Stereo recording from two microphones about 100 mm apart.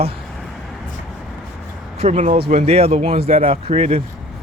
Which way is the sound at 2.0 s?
90° right.